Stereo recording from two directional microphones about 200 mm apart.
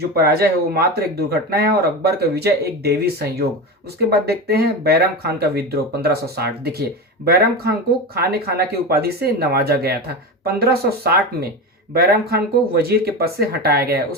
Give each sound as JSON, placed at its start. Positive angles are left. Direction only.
{"t": 0.2, "sound": "speech", "side_deg": -50}
{"t": 4.4, "sound": "speech", "side_deg": -50}